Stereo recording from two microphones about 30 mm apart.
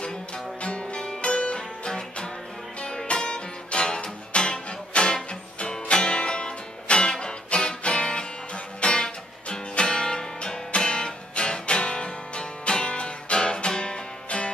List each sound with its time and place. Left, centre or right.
0.6 s music: left
3.2 s music: left